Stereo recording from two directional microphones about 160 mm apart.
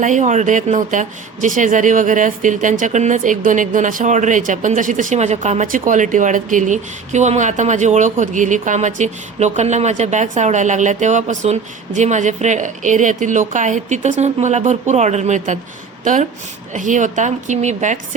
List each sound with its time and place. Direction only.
0.0 s speech: 50° right (ahead or behind)
16.7 s speech: 55° right (ahead or behind)